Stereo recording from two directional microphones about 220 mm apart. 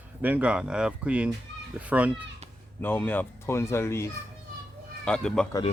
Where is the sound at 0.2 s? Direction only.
5° right (ahead or behind).